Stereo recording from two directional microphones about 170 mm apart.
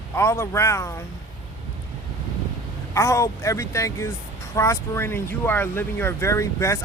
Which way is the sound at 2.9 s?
15° left (ahead or behind).